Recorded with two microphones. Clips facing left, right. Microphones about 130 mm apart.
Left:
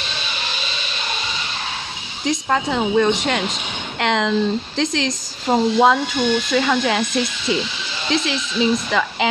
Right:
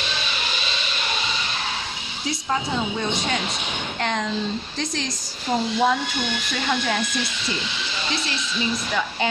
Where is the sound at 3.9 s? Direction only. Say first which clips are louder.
Left 7 dB; 90° left.